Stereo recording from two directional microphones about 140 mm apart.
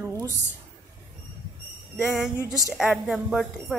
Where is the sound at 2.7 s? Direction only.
5° right (ahead or behind).